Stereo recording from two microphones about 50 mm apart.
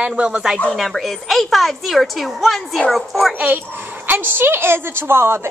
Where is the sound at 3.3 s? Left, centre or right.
Right.